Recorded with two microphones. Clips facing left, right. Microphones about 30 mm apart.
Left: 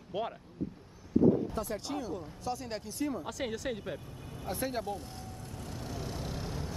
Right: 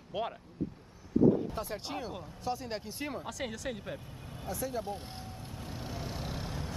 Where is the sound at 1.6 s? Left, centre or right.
Right.